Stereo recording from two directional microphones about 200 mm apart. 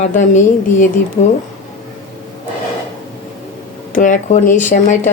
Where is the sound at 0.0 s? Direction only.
40° left (ahead or behind).